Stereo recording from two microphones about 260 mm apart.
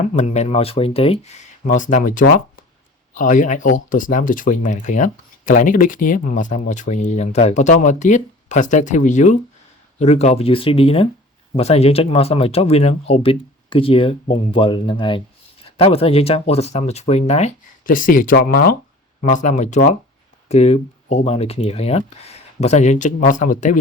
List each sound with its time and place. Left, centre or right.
0.2 s speech: left